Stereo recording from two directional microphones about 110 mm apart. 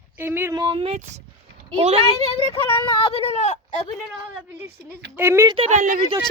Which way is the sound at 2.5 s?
55° left (ahead or behind).